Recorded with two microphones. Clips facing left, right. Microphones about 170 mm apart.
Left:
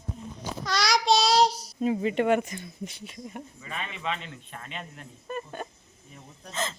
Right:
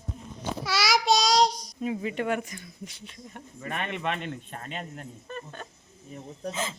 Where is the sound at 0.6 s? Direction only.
5° right (ahead or behind).